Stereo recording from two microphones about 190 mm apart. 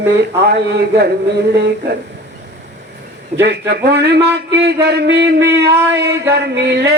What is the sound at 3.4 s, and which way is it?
Speech, 60° right (ahead or behind).